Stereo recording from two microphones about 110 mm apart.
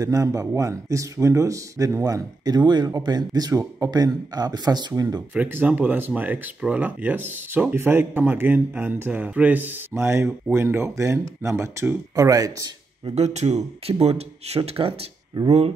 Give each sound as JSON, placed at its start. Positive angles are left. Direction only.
{"t": 0.0, "sound": "speech", "side_deg": -30}
{"t": 5.3, "sound": "speech", "side_deg": -15}
{"t": 13.1, "sound": "speech", "side_deg": -80}